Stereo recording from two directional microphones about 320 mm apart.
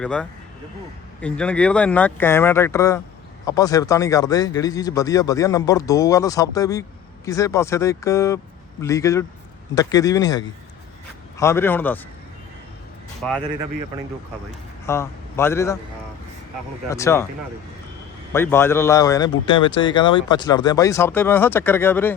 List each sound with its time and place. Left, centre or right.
0.0 s speech: centre
13.2 s speech: centre
14.8 s a man's voice: centre
16.9 s speech: centre
18.3 s speech: centre